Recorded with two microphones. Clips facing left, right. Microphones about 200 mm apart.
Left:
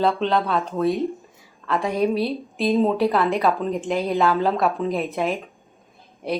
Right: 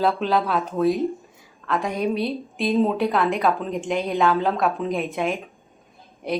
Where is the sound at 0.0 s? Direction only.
5° right (ahead or behind).